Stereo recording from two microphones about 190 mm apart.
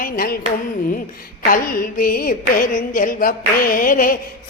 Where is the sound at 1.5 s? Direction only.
45° left (ahead or behind).